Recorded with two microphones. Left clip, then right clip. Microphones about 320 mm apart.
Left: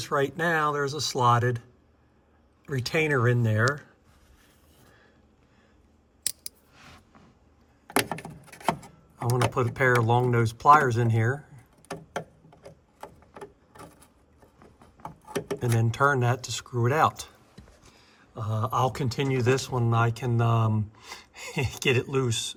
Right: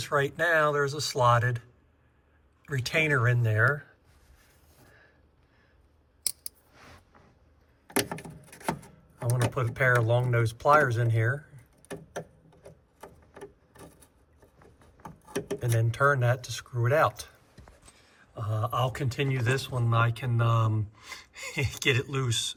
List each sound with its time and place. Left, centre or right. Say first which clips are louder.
0.0 s speech: even; centre
2.6 s speech: left 1 dB; centre
7.9 s a sound: left 3 dB; centre
9.5 s speech: even; centre
13.0 s a sound: left 3 dB; centre
15.5 s speech: left 2 dB; left
18.3 s speech: left 3 dB; centre